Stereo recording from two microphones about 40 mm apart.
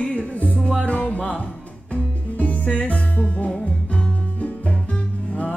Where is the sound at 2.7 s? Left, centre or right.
Left.